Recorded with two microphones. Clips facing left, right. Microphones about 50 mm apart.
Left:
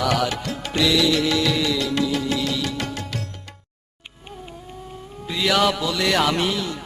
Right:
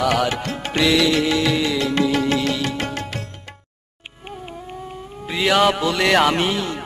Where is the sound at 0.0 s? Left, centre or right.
Right.